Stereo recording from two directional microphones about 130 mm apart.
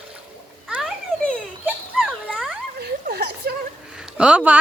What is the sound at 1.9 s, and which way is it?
Dog, 10° right (ahead or behind).